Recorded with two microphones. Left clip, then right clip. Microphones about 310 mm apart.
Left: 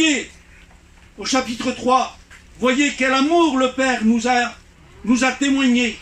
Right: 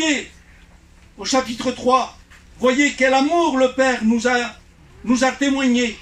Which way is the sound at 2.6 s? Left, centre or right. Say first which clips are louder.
Right 2 dB; right.